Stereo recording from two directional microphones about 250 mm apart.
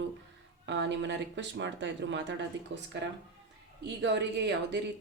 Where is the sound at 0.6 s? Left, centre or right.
Right.